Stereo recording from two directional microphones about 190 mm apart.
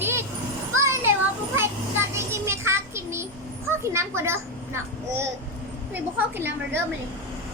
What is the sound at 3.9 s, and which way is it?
A child's voice, 15° right (ahead or behind).